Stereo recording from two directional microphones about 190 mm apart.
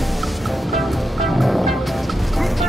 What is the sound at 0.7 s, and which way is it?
Music, centre (ahead or behind).